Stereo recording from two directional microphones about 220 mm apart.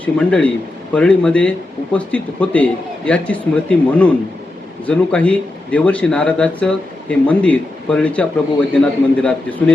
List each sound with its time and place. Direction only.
0.0 s speech: 5° left (ahead or behind)